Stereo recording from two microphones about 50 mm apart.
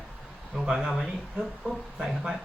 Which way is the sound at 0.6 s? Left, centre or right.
Centre.